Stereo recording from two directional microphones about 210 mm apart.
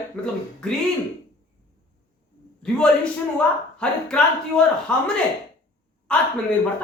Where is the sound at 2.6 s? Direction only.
5° left (ahead or behind).